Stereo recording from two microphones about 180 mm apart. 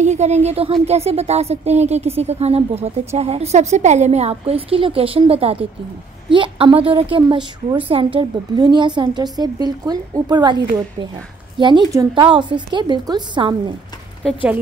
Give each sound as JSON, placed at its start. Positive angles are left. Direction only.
{"t": 0.0, "sound": "a woman's voice", "side_deg": -40}